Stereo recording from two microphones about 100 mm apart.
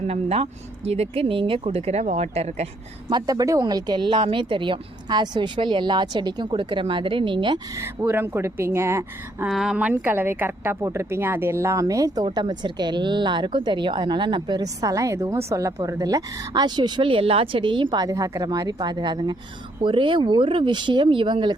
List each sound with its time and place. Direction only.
0.1 s speech: 90° right
3.1 s speech: 40° right (ahead or behind)
7.8 s a woman's voice: 25° right (ahead or behind)
9.5 s speech: 5° right (ahead or behind)
9.7 s a woman's voice: 15° right (ahead or behind); by 12.2 s 35° right (ahead or behind)
12.2 s speech: 45° right (ahead or behind)